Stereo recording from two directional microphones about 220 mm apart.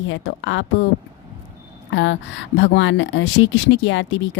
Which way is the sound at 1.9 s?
55° left (ahead or behind).